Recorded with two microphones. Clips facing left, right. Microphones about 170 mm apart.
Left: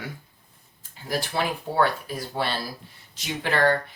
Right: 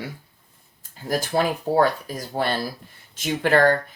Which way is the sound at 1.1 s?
45° right (ahead or behind).